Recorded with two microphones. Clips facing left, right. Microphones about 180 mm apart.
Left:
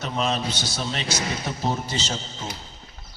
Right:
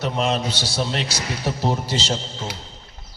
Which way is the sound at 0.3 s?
30° right (ahead or behind).